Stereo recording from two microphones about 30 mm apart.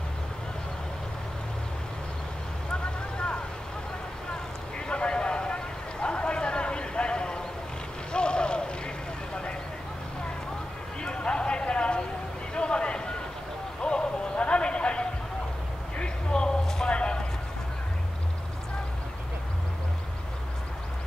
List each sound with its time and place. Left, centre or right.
2.7 s vehicle: left
4.7 s clip-clop: left
8.1 s a sound: left
11.0 s clip-clop: left
12.5 s a sound: left
16.8 s clip-clop: left